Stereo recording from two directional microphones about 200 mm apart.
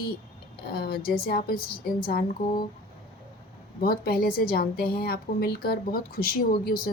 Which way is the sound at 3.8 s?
50° left (ahead or behind).